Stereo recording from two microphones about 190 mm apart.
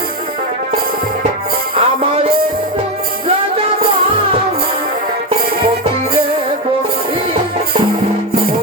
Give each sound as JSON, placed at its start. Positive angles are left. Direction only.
{"t": 1.7, "sound": "music", "side_deg": -30}